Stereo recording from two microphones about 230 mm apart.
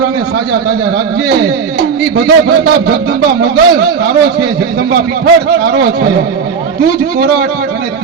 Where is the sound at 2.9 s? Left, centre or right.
Right.